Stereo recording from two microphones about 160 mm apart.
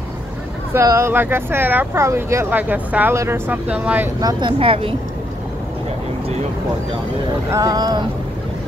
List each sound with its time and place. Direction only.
0.7 s speech: 15° right (ahead or behind)
4.2 s speech: 25° right (ahead or behind)
7.5 s speech: 25° right (ahead or behind)